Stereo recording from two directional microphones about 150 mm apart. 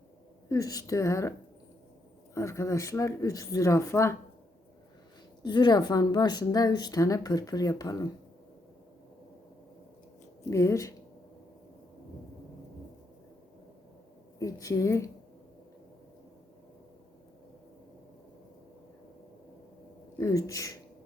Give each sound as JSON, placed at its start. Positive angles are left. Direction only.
{"t": 0.4, "sound": "a woman's voice", "side_deg": 20}
{"t": 2.3, "sound": "a woman's voice", "side_deg": 20}
{"t": 5.4, "sound": "a woman's voice", "side_deg": 30}
{"t": 10.5, "sound": "a woman's voice", "side_deg": 20}
{"t": 14.3, "sound": "a woman's voice", "side_deg": 20}
{"t": 20.1, "sound": "a woman's voice", "side_deg": 20}